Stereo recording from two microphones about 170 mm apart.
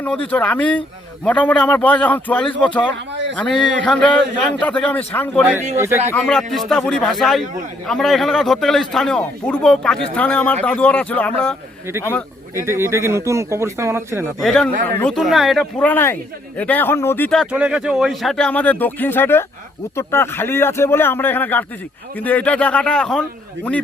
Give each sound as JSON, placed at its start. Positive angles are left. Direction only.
{"t": 0.3, "sound": "a man's voice", "side_deg": 10}
{"t": 5.7, "sound": "speech", "side_deg": -15}
{"t": 6.1, "sound": "a man's voice", "side_deg": 5}
{"t": 12.5, "sound": "speech", "side_deg": -15}
{"t": 14.4, "sound": "a man's voice", "side_deg": 5}
{"t": 17.4, "sound": "a man's voice", "side_deg": -5}